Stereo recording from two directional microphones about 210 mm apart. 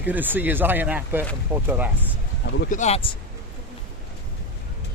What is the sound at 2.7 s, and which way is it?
Speech, 35° left (ahead or behind).